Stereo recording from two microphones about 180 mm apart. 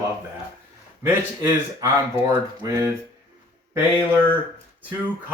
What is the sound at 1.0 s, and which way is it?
Speech, 20° right (ahead or behind).